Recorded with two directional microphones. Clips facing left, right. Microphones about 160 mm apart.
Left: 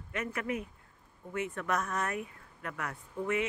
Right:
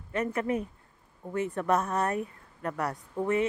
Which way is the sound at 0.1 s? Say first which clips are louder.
Right 6 dB; 35° right (ahead or behind).